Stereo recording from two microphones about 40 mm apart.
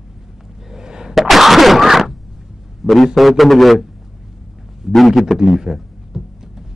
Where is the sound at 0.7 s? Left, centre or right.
Centre.